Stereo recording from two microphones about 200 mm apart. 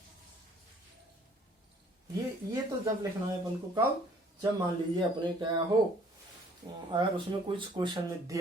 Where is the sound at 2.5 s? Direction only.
15° right (ahead or behind).